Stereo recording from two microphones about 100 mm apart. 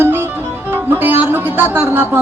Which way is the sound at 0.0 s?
25° right (ahead or behind).